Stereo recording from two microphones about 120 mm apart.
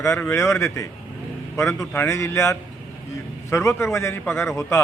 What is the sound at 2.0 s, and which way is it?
Speech, 25° left (ahead or behind).